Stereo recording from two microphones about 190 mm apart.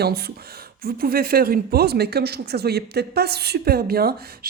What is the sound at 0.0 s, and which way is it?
Speech, 55° right (ahead or behind).